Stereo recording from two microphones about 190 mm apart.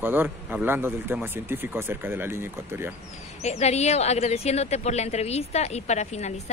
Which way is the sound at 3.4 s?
35° left (ahead or behind).